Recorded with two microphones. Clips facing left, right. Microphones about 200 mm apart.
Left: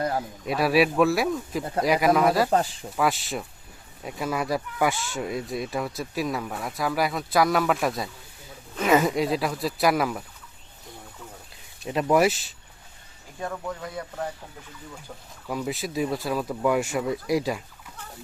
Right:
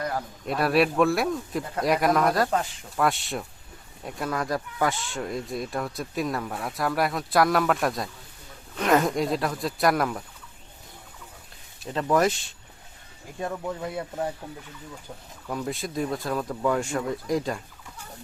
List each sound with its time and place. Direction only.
0.0 s a sound: 25° left (ahead or behind)
0.4 s speech: 5° left (ahead or behind)
2.5 s speech: 35° left (ahead or behind)
2.9 s speech: centre (ahead or behind)
11.9 s speech: 15° left (ahead or behind)
13.4 s speech: 25° right (ahead or behind)
15.4 s speech: 5° left (ahead or behind)